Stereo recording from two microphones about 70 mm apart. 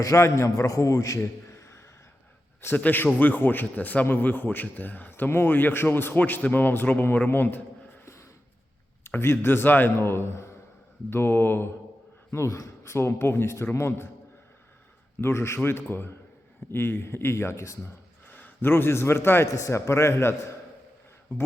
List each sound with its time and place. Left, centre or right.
0.0 s a man's voice: left
1.5 s a sound: left
2.7 s a man's voice: left
8.0 s a sound: left
9.0 s speech: left
12.3 s speech: left
15.2 s speech: left
18.3 s a man's voice: left
19.5 s speech: left